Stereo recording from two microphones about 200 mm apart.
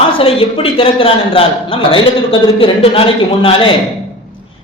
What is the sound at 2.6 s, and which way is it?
A man's voice, 25° left (ahead or behind).